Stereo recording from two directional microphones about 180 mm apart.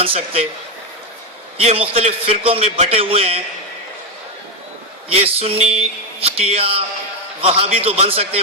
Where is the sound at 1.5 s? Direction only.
30° right (ahead or behind).